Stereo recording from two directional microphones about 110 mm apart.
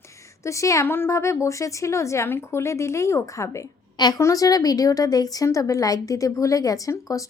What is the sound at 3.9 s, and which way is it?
A woman's voice, 40° left (ahead or behind).